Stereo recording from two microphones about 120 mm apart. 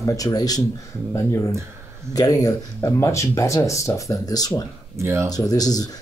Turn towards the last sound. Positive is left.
turn(degrees=30)  # may be behind; listen again after turning